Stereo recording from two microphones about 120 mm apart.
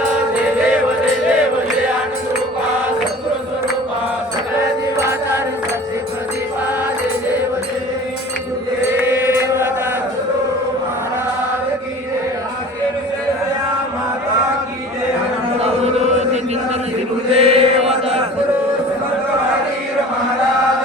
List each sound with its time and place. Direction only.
9.0 s chant: 20° right (ahead or behind)
15.6 s chant: 70° right (ahead or behind)
17.3 s chant: 60° right (ahead or behind)